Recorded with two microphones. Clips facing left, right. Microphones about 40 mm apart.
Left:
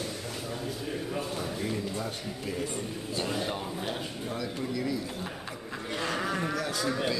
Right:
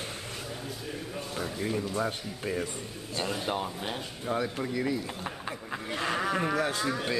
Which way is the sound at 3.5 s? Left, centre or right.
Centre.